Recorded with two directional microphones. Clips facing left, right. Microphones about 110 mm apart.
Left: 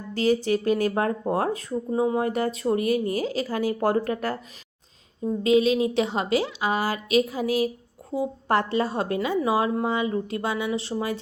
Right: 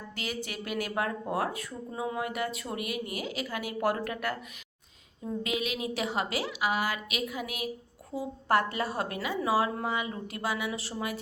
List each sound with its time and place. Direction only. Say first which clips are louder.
0.1 s a woman's voice: left 16 dB; 35° left (ahead or behind)
8.1 s a woman's voice: left 4 dB; 20° left (ahead or behind)